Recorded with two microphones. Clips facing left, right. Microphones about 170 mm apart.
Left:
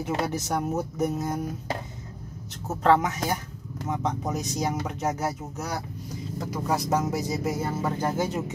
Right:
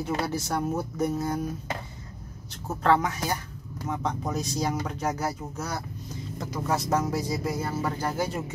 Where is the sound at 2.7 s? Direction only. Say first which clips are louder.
Left 2 dB; 20° left (ahead or behind).